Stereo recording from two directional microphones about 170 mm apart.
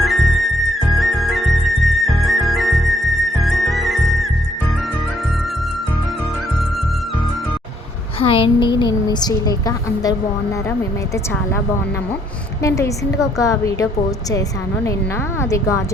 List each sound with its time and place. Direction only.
0.0 s music: centre (ahead or behind)
8.2 s a woman's voice: 30° left (ahead or behind)
12.6 s a woman's voice: 20° left (ahead or behind)
15.4 s a woman's voice: 20° left (ahead or behind)